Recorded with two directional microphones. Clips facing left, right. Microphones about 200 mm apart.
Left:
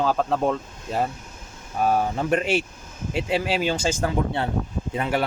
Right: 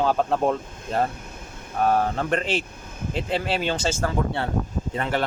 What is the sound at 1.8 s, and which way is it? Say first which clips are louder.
Speech: left 1 dB; 10° left (ahead or behind).